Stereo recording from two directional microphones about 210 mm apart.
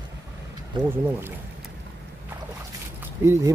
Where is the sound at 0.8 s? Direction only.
10° right (ahead or behind).